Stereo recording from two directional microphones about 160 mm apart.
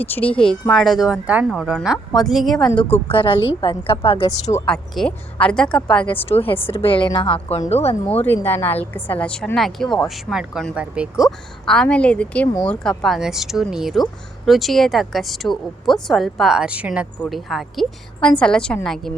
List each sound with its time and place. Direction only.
0.0 s a woman's voice: 10° left (ahead or behind)
3.1 s a woman's voice: 35° left (ahead or behind)
4.5 s a woman's voice: 5° left (ahead or behind)
6.1 s a woman's voice: 35° left (ahead or behind)
8.2 s a woman's voice: 15° left (ahead or behind)